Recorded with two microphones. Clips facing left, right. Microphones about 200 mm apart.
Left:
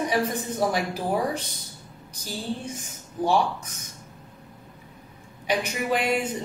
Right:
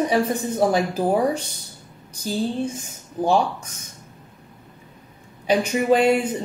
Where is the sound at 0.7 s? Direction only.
30° right (ahead or behind).